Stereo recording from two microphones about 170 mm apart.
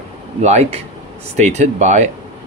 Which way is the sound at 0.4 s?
40° right (ahead or behind).